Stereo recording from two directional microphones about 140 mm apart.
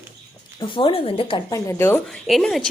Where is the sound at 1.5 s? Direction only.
20° left (ahead or behind).